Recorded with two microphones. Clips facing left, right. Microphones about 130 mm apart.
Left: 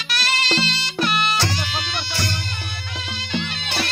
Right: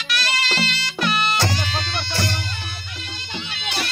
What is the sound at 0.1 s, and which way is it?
Music, 30° left (ahead or behind).